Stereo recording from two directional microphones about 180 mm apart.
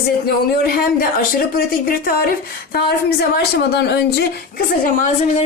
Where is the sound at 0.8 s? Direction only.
55° left (ahead or behind).